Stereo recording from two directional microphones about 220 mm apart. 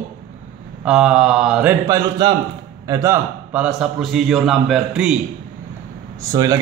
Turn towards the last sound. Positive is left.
turn(degrees=-15)  # may be behind; listen again after turning